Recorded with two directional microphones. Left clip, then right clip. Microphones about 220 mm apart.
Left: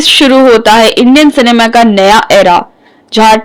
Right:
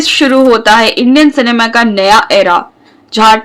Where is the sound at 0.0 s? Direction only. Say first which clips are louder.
Left 3 dB; 30° left (ahead or behind).